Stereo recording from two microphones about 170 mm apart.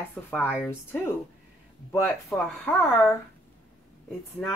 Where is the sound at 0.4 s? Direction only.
10° right (ahead or behind).